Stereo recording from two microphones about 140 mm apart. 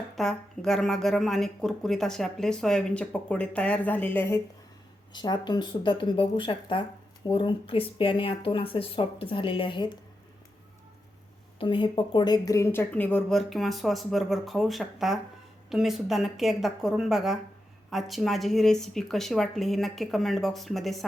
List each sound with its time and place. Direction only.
0.2 s a woman's voice: centre (ahead or behind)
5.1 s speech: 30° left (ahead or behind)
11.6 s a woman's voice: 35° left (ahead or behind); by 21.0 s centre (ahead or behind)